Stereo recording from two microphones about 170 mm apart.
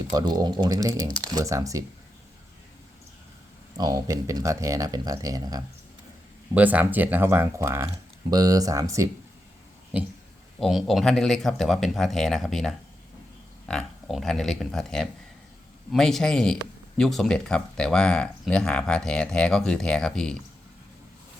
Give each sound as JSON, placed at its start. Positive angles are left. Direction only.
{"t": 0.1, "sound": "speech", "side_deg": -25}
{"t": 3.8, "sound": "speech", "side_deg": -20}
{"t": 6.5, "sound": "speech", "side_deg": -10}
{"t": 9.9, "sound": "speech", "side_deg": -5}